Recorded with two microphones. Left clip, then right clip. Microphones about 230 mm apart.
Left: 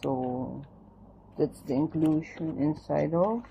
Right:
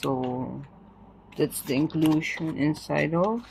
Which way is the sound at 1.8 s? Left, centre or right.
Right.